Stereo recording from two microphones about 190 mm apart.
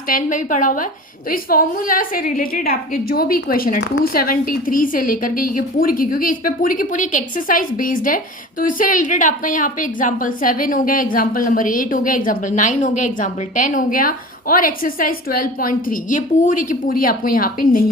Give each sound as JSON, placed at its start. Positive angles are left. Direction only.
{"t": 0.1, "sound": "a woman's voice", "side_deg": 45}